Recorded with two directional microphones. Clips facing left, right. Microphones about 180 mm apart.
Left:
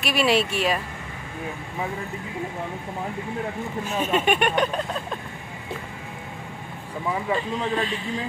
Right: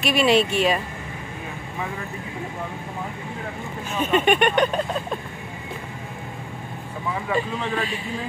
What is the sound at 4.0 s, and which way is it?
Speech, 5° left (ahead or behind).